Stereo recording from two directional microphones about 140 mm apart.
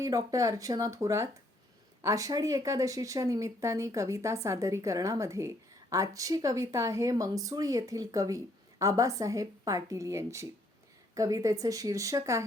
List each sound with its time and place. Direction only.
0.0 s speech: 25° right (ahead or behind)